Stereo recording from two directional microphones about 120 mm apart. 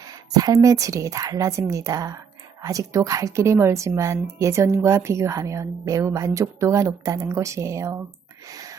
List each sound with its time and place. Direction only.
0.3 s a woman's voice: 30° right (ahead or behind)